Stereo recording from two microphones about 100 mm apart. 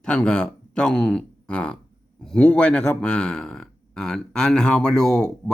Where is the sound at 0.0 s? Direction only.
10° left (ahead or behind).